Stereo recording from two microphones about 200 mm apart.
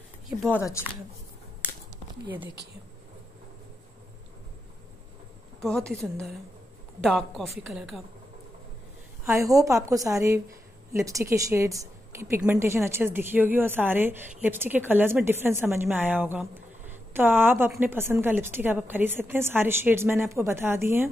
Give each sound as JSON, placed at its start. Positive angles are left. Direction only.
{"t": 0.3, "sound": "a woman's voice", "side_deg": 0}
{"t": 5.6, "sound": "a woman's voice", "side_deg": 5}
{"t": 9.4, "sound": "a woman's voice", "side_deg": -15}